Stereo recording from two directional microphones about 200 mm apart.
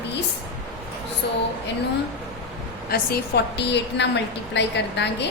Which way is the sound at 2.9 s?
55° left (ahead or behind).